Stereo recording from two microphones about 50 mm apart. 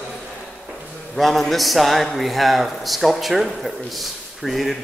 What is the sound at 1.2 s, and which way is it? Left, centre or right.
A man's voice, centre.